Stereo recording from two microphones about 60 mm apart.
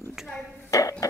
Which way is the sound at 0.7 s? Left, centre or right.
Left.